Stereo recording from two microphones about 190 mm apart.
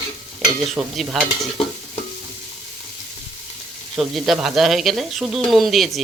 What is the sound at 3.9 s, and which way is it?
Speech, centre (ahead or behind).